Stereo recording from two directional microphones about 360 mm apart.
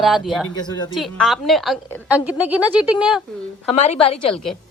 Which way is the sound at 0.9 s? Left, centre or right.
Centre.